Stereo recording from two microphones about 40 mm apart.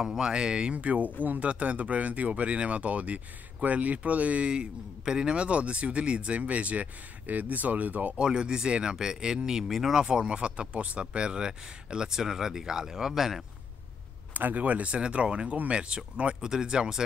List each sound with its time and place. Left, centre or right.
0.0 s speech: centre
0.3 s a man's voice: right
4.5 s a man's voice: centre; by 8.1 s right
8.2 s speech: right
9.9 s speech: centre
14.3 s a man's voice: right
15.0 s speech: right
16.3 s speech: centre